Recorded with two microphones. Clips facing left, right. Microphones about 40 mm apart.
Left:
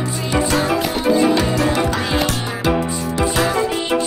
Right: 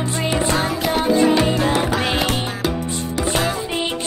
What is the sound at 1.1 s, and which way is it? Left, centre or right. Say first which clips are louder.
Music: left 1 dB; centre.